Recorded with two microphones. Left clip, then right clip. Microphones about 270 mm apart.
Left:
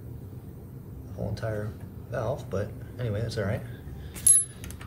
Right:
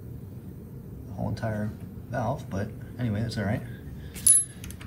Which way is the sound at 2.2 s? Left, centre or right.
Centre.